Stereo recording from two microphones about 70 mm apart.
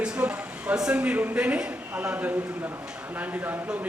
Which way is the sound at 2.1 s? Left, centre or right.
Right.